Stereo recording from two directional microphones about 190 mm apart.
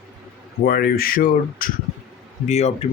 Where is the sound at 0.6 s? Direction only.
50° left (ahead or behind).